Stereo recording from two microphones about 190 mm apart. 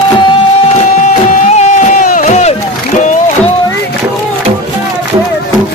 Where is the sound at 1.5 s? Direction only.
40° left (ahead or behind).